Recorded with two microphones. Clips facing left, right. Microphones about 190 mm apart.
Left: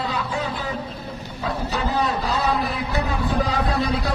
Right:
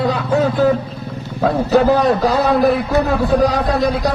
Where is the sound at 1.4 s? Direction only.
60° right (ahead or behind).